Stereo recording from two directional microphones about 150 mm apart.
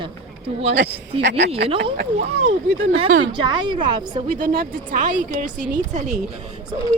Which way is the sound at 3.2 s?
30° right (ahead or behind).